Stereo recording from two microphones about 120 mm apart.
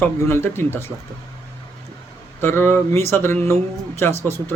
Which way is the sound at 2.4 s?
20° left (ahead or behind).